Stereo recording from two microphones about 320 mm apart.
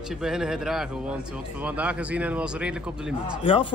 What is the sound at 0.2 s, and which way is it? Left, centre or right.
A man's voice, centre.